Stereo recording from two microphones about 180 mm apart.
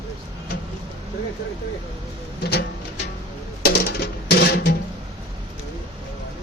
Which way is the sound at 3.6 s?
60° left (ahead or behind).